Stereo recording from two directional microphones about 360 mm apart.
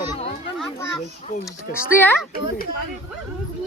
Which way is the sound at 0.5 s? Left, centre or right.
Centre.